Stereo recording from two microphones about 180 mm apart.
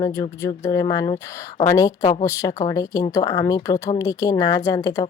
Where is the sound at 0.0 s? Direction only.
15° left (ahead or behind).